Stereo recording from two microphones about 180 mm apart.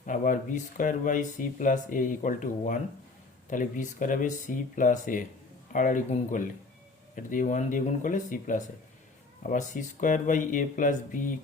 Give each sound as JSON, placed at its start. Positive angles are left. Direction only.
{"t": 0.0, "sound": "speech", "side_deg": 45}